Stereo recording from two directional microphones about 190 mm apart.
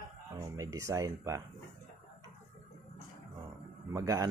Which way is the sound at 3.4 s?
15° right (ahead or behind).